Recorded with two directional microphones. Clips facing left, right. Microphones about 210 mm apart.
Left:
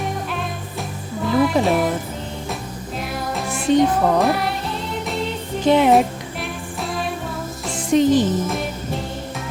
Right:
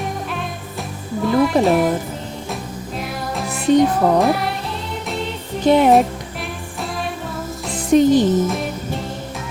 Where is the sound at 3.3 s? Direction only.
Centre (ahead or behind).